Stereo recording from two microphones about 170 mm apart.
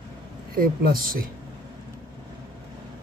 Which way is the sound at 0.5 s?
55° right (ahead or behind).